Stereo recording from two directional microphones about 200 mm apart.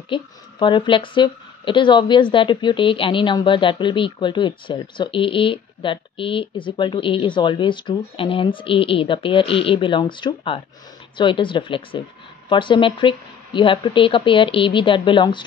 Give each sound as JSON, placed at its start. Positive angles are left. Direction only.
{"t": 0.1, "sound": "speech", "side_deg": 25}